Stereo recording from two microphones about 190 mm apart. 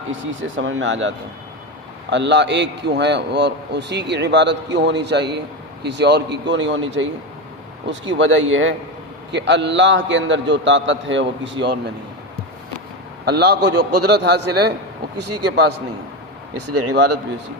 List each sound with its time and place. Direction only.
0.1 s speech: 80° right
2.0 s a man's voice: 65° right (ahead or behind); by 8.7 s 90° right
9.3 s a man's voice: 65° right (ahead or behind)
13.2 s a man's voice: 60° right (ahead or behind)